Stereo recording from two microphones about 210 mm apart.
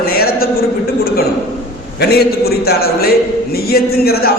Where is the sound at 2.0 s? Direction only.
50° left (ahead or behind).